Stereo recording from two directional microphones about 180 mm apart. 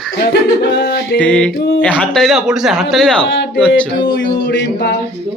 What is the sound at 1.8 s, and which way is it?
Speech, 5° left (ahead or behind).